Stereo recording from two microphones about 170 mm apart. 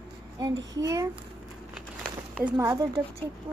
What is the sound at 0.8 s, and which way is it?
Speech, 20° right (ahead or behind).